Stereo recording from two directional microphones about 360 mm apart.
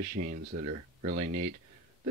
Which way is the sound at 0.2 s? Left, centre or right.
Right.